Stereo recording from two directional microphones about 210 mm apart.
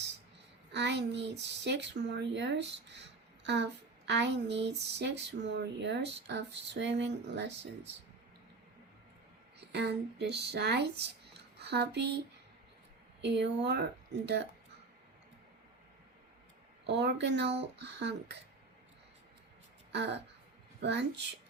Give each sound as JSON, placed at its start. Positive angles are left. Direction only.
{"t": 0.7, "sound": "speech", "side_deg": -55}
{"t": 9.6, "sound": "speech", "side_deg": -55}
{"t": 13.2, "sound": "speech", "side_deg": -55}
{"t": 16.8, "sound": "speech", "side_deg": -55}
{"t": 19.9, "sound": "speech", "side_deg": -55}